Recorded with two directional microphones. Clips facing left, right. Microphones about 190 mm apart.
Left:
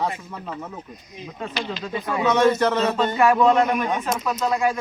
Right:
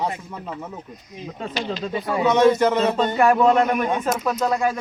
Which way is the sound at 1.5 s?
40° right (ahead or behind).